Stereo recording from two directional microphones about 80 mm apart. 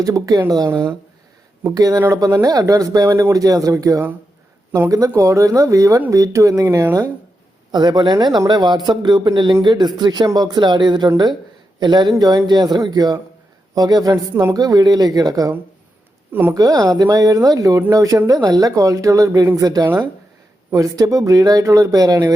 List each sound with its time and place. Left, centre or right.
0.0 s speech: right
3.1 s speech: right
3.3 s speech: right
7.7 s a man's voice: right
9.6 s a man's voice: right
12.1 s speech: right
12.5 s speech: right
16.3 s speech: right
16.6 s speech: right
18.3 s speech: right
18.6 s speech: right